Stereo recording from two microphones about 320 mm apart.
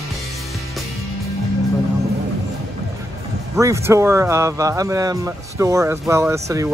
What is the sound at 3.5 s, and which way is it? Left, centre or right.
Speech, centre.